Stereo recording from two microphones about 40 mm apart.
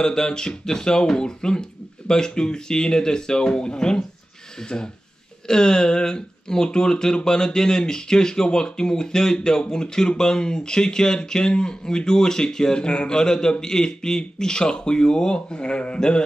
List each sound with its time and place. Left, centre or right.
0.0 s speech: centre